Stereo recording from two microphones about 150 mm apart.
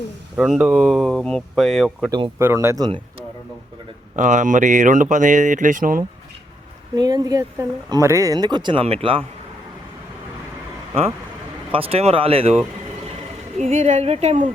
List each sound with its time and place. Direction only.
0.3 s speech: 5° right (ahead or behind)
2.0 s speech: 30° right (ahead or behind)
2.4 s speech: 15° right (ahead or behind)
4.1 s speech: 55° right (ahead or behind)
6.9 s speech: 25° right (ahead or behind)
11.7 s speech: 40° right (ahead or behind)
13.6 s a woman's voice: 50° right (ahead or behind)